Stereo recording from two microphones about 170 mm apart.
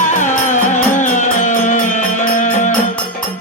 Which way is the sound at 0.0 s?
45° left (ahead or behind).